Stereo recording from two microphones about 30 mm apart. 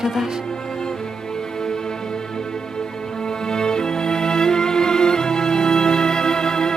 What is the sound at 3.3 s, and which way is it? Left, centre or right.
Music, left.